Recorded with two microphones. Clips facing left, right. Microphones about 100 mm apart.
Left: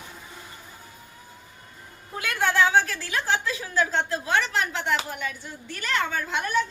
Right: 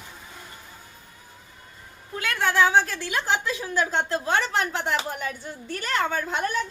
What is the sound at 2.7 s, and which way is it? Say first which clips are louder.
Speech: right 1 dB; 15° right (ahead or behind).